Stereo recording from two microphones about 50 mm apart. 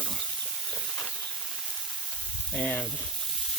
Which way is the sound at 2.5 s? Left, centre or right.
Left.